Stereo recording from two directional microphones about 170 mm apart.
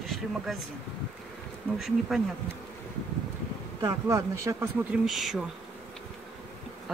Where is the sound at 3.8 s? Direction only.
20° right (ahead or behind).